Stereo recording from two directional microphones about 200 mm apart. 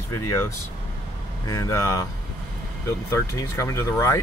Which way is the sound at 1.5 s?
15° left (ahead or behind).